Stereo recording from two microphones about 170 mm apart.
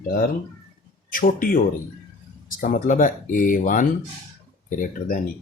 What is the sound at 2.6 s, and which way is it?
Speech, 50° left (ahead or behind).